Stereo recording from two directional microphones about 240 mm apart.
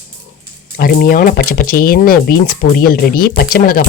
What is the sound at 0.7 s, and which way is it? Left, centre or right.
Speech, left.